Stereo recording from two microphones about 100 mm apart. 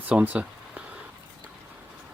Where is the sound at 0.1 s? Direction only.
15° right (ahead or behind).